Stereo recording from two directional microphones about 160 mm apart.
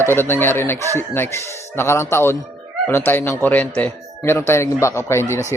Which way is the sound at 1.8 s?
15° left (ahead or behind).